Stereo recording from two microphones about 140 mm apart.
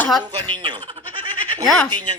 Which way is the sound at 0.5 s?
35° right (ahead or behind).